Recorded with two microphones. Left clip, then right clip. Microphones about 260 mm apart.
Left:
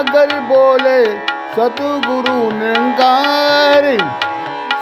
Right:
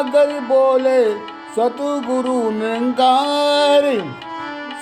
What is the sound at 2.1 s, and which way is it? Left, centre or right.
Music, left.